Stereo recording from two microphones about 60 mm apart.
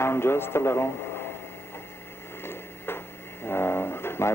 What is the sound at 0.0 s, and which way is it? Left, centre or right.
Speech, left.